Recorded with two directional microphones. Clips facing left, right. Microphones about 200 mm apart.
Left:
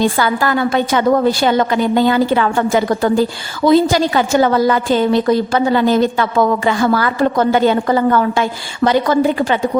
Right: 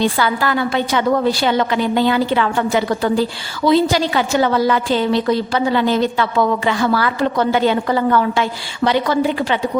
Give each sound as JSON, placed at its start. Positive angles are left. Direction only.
{"t": 0.0, "sound": "a woman's voice", "side_deg": 45}